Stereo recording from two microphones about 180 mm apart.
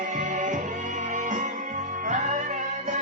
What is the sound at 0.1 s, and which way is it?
Music, 45° right (ahead or behind).